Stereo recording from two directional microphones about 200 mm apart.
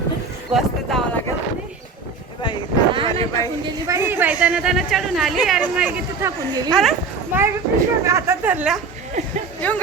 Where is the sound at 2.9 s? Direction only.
25° right (ahead or behind).